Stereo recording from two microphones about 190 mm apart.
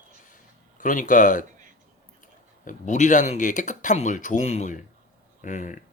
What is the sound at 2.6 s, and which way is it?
A man's voice, 40° left (ahead or behind).